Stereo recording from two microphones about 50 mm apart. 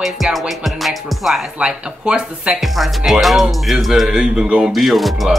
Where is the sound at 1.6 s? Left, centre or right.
Right.